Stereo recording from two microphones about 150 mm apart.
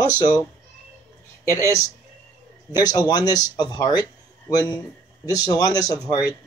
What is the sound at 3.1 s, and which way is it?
Speech, 25° left (ahead or behind).